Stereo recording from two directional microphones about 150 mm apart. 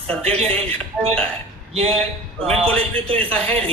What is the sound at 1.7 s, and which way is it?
Speech, 40° right (ahead or behind).